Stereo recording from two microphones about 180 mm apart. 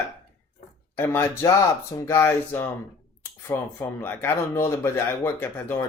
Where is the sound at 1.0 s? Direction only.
15° left (ahead or behind).